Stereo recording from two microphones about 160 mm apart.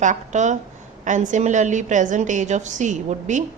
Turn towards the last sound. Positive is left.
turn(degrees=-50)  # may be behind; listen again after turning